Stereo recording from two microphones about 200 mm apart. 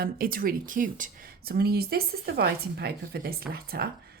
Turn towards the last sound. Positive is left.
turn(degrees=-50)  # may be behind; listen again after turning